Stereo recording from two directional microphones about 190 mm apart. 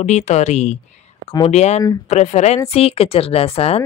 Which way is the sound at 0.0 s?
35° left (ahead or behind).